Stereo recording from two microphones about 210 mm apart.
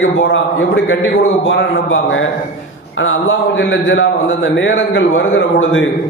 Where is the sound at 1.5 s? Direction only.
65° left (ahead or behind).